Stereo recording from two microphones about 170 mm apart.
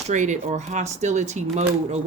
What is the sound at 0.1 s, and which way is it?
Speech, 45° right (ahead or behind).